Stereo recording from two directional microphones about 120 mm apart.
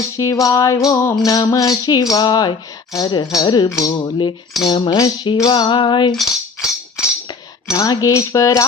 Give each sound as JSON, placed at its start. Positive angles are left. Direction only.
{"t": 0.2, "sound": "cutlery", "side_deg": 25}
{"t": 1.1, "sound": "speech", "side_deg": 30}
{"t": 4.0, "sound": "speech", "side_deg": 40}
{"t": 6.1, "sound": "music", "side_deg": -5}
{"t": 7.7, "sound": "cutlery", "side_deg": 30}